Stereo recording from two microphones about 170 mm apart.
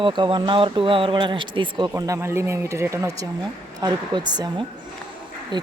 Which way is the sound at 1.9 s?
20° right (ahead or behind).